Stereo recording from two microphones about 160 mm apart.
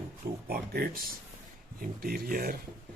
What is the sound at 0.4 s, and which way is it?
Speech, 70° right (ahead or behind).